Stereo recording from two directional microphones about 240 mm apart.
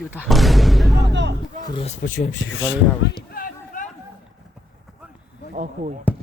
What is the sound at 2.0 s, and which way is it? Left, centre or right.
Speech, left.